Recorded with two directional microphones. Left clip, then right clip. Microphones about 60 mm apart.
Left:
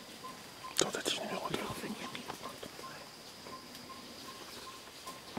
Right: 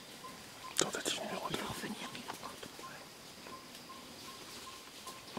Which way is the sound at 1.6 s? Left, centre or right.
Right.